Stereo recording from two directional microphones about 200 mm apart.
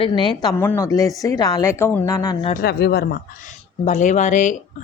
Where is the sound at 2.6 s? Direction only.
55° left (ahead or behind).